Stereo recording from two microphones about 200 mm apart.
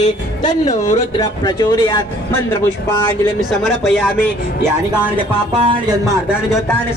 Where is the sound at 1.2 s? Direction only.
20° left (ahead or behind).